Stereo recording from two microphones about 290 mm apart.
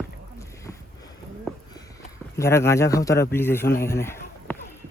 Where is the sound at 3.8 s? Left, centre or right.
Centre.